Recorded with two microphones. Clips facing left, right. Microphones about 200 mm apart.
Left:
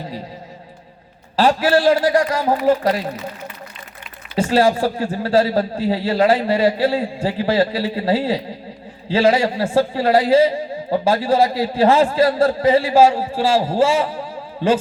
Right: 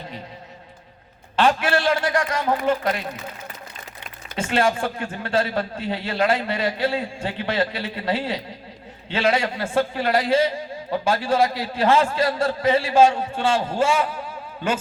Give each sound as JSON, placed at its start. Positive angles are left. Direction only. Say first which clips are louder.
{"t": 1.4, "sound": "a man's voice", "louder": "left 5 dB", "side_deg": 35}
{"t": 4.4, "sound": "a man's voice", "louder": "left 6 dB", "side_deg": 35}